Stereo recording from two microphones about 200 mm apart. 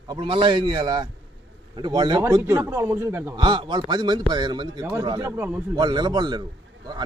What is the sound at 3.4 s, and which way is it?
A man's voice, 25° right (ahead or behind).